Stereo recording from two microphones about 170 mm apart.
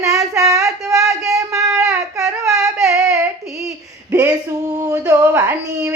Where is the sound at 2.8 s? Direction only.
20° right (ahead or behind).